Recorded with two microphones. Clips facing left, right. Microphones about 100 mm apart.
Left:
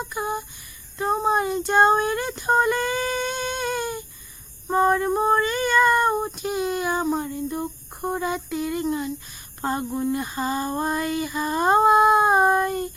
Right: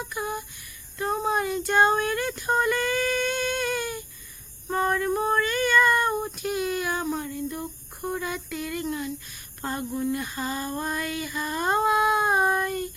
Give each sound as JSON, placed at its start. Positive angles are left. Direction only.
{"t": 0.0, "sound": "a sound", "side_deg": 25}
{"t": 0.9, "sound": "female singing", "side_deg": 25}
{"t": 9.6, "sound": "female singing", "side_deg": 35}
{"t": 11.3, "sound": "child singing", "side_deg": 35}